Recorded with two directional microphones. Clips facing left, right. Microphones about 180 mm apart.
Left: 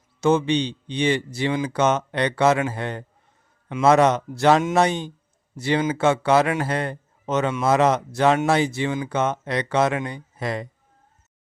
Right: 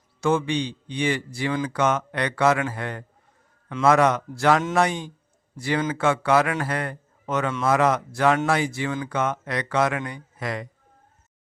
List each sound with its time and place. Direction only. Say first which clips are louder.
0.2 s speech: left 3 dB; 20° left (ahead or behind)